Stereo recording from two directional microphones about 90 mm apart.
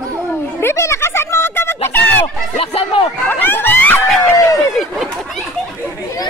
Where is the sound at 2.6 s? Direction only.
90° left.